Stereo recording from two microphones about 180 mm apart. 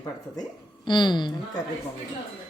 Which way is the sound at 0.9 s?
25° left (ahead or behind).